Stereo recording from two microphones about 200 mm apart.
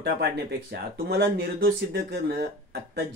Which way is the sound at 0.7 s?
55° right (ahead or behind).